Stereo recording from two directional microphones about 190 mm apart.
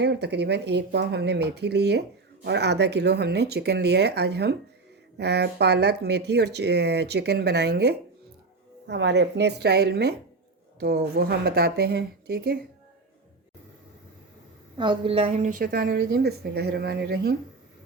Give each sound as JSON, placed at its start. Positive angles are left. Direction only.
{"t": 0.0, "sound": "speech", "side_deg": -60}
{"t": 14.8, "sound": "speech", "side_deg": -25}